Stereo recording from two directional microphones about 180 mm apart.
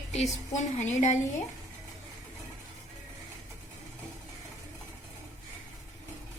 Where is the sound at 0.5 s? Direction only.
40° left (ahead or behind).